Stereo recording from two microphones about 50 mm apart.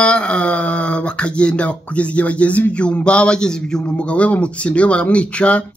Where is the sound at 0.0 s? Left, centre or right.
Left.